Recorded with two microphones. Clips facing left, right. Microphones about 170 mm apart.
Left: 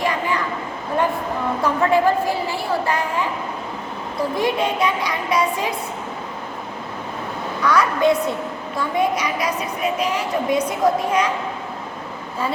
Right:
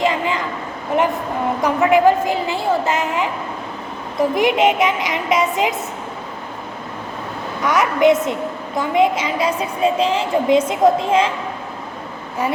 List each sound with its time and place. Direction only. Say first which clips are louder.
0.0 s a sound: right 3 dB; 20° right (ahead or behind)
1.6 s a woman's voice: right 4 dB; 15° right (ahead or behind)
7.6 s a woman's voice: right 3 dB; 20° right (ahead or behind)